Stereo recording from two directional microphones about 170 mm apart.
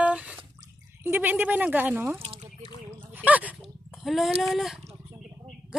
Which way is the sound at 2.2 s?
35° right (ahead or behind).